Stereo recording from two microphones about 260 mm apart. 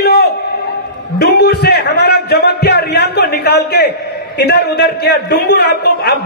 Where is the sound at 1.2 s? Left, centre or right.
Left.